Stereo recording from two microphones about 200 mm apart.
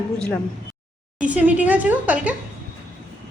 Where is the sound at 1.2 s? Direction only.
5° right (ahead or behind).